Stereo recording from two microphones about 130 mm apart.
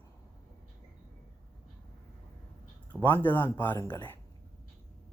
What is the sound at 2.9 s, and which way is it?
Speech, 15° left (ahead or behind).